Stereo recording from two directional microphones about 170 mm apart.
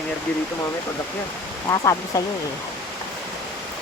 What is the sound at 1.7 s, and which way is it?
Speech, 20° left (ahead or behind).